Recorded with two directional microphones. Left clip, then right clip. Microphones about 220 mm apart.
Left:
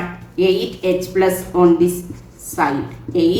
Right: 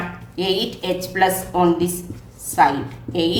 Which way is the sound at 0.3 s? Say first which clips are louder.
Left 5 dB; 40° right (ahead or behind).